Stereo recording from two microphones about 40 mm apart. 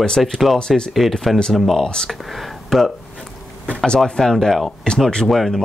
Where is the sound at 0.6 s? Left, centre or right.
Centre.